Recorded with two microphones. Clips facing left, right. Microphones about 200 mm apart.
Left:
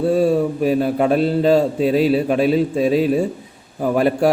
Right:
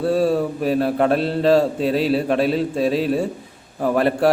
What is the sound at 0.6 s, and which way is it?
Speech, centre (ahead or behind).